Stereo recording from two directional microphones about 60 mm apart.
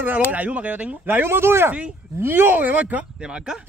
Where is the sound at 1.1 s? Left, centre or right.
Right.